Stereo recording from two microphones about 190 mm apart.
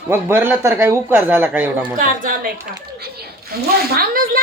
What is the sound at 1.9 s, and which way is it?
Speech, 45° right (ahead or behind).